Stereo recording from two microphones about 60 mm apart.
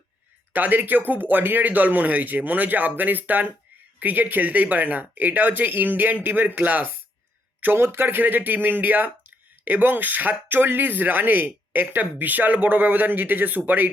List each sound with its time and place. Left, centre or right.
0.5 s speech: right
7.6 s speech: right